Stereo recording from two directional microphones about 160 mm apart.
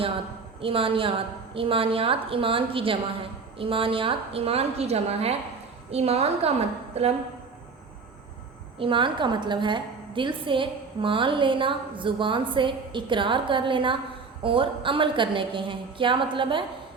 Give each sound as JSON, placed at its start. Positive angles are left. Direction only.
{"t": 0.6, "sound": "a woman's voice", "side_deg": -35}
{"t": 8.8, "sound": "a woman's voice", "side_deg": -30}